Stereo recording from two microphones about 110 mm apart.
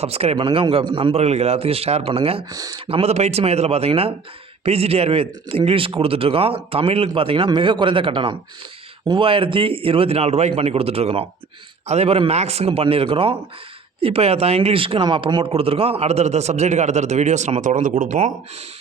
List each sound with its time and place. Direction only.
0.0 s speech: 70° right (ahead or behind)
0.3 s speech: 50° right (ahead or behind)
1.1 s speech: 75° right (ahead or behind)
2.5 s speech: 35° right (ahead or behind)
2.9 s speech: 70° right (ahead or behind); by 18.3 s 90° right